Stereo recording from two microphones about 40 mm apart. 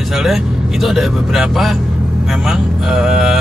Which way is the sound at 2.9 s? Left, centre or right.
Centre.